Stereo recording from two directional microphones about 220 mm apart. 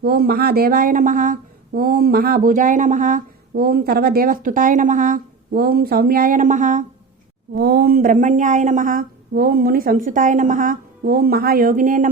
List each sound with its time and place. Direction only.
0.0 s speech: 45° right (ahead or behind)
7.5 s speech: 45° right (ahead or behind)